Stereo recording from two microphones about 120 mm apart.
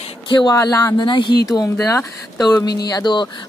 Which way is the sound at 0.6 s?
30° left (ahead or behind).